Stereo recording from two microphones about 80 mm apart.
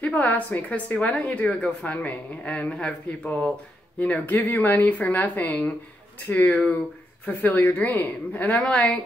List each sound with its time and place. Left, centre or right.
0.0 s a woman's voice: centre